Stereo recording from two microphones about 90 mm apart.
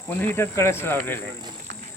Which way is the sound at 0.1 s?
25° left (ahead or behind).